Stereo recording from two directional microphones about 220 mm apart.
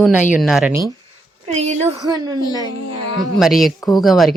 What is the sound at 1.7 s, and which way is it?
Speech, 30° right (ahead or behind).